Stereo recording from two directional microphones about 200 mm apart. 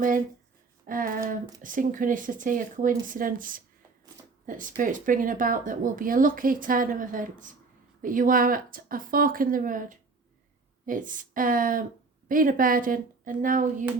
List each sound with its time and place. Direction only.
0.9 s speech: 45° right (ahead or behind)